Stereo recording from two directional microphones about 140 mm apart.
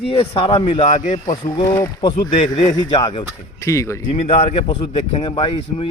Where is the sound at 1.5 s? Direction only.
35° left (ahead or behind).